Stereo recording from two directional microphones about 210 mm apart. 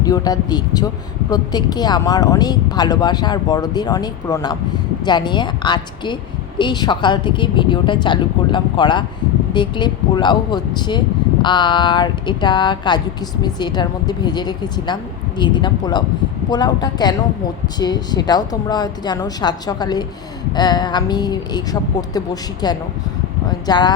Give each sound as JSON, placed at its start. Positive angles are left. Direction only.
{"t": 0.0, "sound": "speech", "side_deg": 15}